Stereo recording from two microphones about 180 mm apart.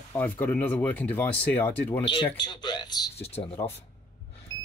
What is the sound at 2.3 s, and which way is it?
Speech, 25° left (ahead or behind).